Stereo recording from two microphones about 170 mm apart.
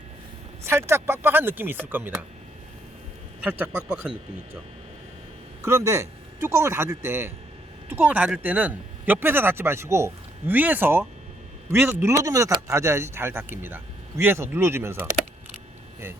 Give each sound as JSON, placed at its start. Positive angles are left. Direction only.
{"t": 0.6, "sound": "speech", "side_deg": -15}
{"t": 3.4, "sound": "speech", "side_deg": -10}
{"t": 5.6, "sound": "speech", "side_deg": -15}